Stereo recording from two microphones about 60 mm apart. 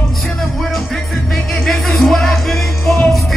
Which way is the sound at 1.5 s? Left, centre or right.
Centre.